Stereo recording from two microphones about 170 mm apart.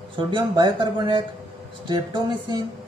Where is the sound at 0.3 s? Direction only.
30° right (ahead or behind).